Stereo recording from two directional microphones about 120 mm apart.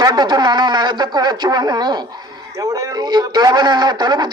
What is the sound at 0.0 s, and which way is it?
Speech, 35° right (ahead or behind).